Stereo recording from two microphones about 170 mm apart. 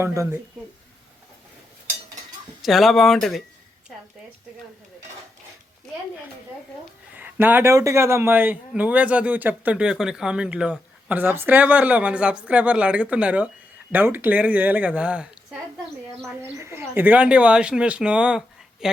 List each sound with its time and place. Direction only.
0.0 s a man's voice: 15° right (ahead or behind)
2.6 s speech: centre (ahead or behind)
7.1 s a man's voice: 10° right (ahead or behind)